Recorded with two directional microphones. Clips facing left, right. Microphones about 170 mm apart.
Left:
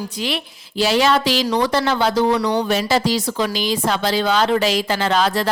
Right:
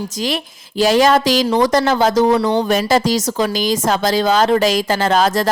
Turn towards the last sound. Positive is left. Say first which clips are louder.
# right 3 dB
turn(degrees=-45)  # may be behind; listen again after turning